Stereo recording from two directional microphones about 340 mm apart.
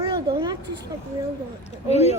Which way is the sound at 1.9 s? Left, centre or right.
Centre.